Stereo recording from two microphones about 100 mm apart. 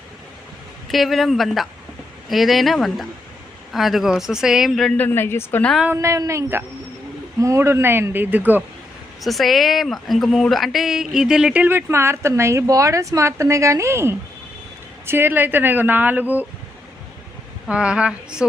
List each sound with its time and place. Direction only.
0.9 s speech: centre (ahead or behind)
4.9 s a woman's voice: 20° left (ahead or behind)
5.9 s a woman's voice: 30° right (ahead or behind)
9.2 s a woman's voice: centre (ahead or behind); by 16.5 s 20° right (ahead or behind)
17.7 s speech: 10° right (ahead or behind)